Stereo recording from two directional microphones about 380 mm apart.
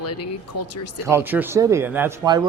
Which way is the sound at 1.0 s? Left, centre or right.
Centre.